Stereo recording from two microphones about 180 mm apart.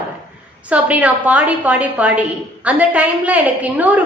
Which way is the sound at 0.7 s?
5° right (ahead or behind).